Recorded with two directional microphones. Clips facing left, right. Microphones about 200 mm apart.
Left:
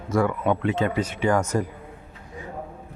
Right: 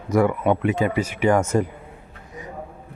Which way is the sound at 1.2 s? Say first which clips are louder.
Right 4 dB; 25° right (ahead or behind).